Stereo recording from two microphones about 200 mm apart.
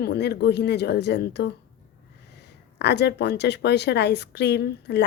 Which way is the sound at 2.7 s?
55° left (ahead or behind).